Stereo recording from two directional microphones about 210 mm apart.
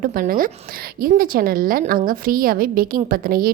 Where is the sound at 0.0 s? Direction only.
45° right (ahead or behind).